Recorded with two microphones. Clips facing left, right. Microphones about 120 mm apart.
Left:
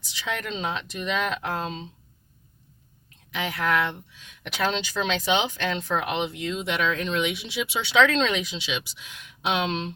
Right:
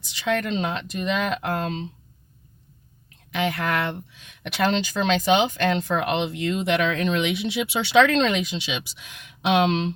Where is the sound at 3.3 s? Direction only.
55° right (ahead or behind).